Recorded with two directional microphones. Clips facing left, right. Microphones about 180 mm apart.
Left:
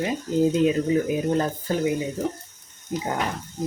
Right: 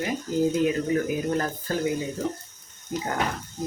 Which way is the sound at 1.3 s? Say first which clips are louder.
Left 3 dB; 20° left (ahead or behind).